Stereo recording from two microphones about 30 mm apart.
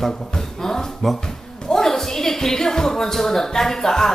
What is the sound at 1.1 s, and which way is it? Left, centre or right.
Music, left.